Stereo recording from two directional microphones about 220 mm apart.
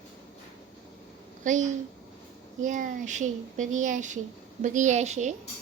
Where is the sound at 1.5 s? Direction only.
35° right (ahead or behind).